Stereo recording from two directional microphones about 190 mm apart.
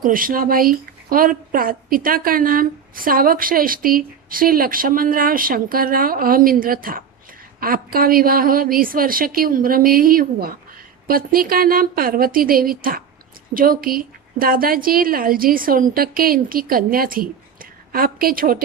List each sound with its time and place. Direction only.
0.0 s speech: 45° right (ahead or behind)